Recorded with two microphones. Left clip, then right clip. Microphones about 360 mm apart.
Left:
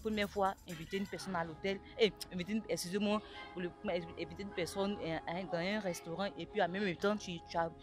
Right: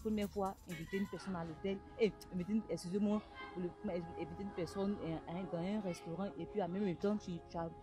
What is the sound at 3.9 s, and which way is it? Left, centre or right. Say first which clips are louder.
Speech: left 3 dB; left.